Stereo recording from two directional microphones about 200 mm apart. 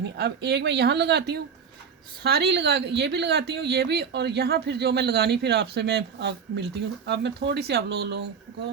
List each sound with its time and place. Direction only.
0.2 s a woman's voice: 60° right (ahead or behind)